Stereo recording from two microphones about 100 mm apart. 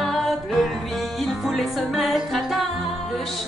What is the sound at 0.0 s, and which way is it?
Music, centre (ahead or behind).